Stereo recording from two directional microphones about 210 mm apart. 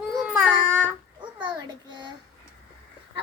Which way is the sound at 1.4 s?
20° right (ahead or behind).